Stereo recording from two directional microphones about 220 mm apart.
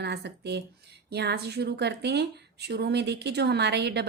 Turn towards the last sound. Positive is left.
turn(degrees=-50)  # may be behind; listen again after turning